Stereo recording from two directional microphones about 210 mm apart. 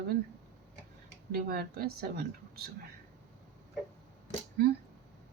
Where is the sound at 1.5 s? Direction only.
45° right (ahead or behind).